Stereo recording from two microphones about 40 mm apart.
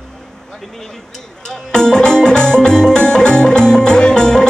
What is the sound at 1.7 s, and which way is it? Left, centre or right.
Music, centre.